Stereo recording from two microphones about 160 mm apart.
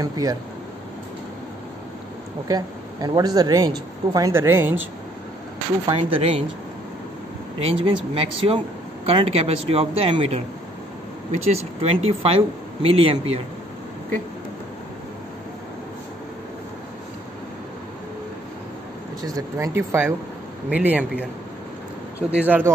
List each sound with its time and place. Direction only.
0.0 s speech: 25° right (ahead or behind)
2.4 s speech: 25° right (ahead or behind)
5.9 s speech: 35° right (ahead or behind)
7.5 s speech: 35° right (ahead or behind)
11.4 s speech: 40° right (ahead or behind)
19.2 s speech: 20° right (ahead or behind)
22.3 s speech: 10° right (ahead or behind)